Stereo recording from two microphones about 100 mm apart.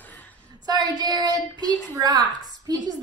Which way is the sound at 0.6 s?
40° right (ahead or behind).